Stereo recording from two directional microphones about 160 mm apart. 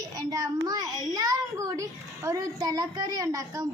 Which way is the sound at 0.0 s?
25° right (ahead or behind).